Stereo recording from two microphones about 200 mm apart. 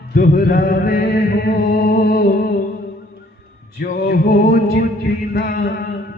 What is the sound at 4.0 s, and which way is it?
Music, 55° left (ahead or behind).